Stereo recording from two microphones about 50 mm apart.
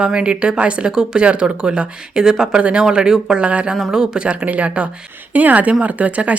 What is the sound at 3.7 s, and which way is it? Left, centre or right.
Speech, centre.